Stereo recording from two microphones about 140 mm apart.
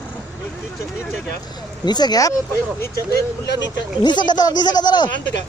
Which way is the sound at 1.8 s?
30° left (ahead or behind).